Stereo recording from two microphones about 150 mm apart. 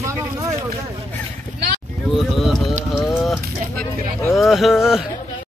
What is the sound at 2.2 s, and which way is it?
Speech, centre (ahead or behind).